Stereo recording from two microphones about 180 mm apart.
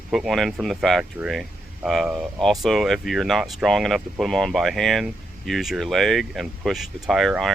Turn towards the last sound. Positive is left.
turn(degrees=0)  # may be behind; listen again after turning